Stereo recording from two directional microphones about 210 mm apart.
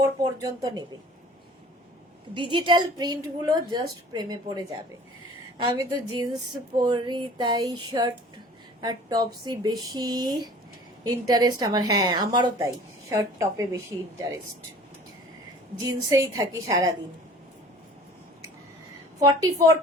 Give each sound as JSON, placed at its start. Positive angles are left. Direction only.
{"t": 0.0, "sound": "speech", "side_deg": -15}
{"t": 2.3, "sound": "a sound", "side_deg": -25}
{"t": 8.8, "sound": "a woman's voice", "side_deg": -20}
{"t": 9.4, "sound": "a sound", "side_deg": -20}
{"t": 11.0, "sound": "speech", "side_deg": -20}
{"t": 15.9, "sound": "speech", "side_deg": -15}
{"t": 19.2, "sound": "speech", "side_deg": -15}